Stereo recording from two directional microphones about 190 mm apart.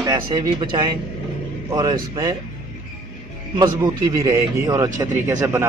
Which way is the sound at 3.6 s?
20° right (ahead or behind).